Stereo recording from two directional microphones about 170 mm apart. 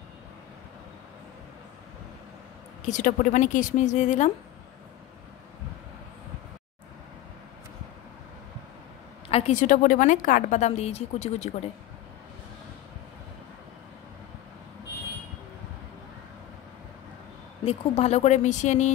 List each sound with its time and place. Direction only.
2.8 s a woman's voice: 45° left (ahead or behind)
9.3 s a woman's voice: 45° left (ahead or behind)
17.6 s a woman's voice: 40° left (ahead or behind)